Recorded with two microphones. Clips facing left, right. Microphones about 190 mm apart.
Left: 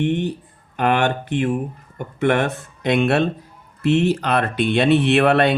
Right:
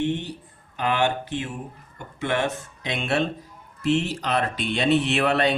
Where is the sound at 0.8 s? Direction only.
55° left (ahead or behind).